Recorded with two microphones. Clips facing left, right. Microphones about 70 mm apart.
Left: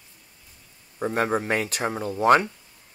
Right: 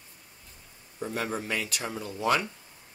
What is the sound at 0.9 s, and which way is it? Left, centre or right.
Speech, left.